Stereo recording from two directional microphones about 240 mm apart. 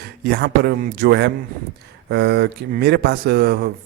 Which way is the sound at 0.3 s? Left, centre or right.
Right.